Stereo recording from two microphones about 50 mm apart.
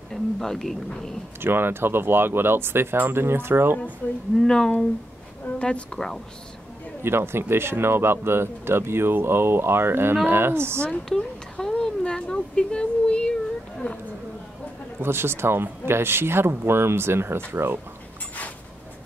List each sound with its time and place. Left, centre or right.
0.1 s speech: centre
1.4 s speech: right
4.0 s speech: left
4.4 s speech: centre
7.0 s speech: right
11.1 s a sound: centre
15.0 s speech: right